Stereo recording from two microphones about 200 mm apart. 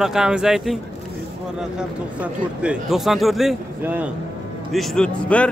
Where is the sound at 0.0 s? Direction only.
5° right (ahead or behind).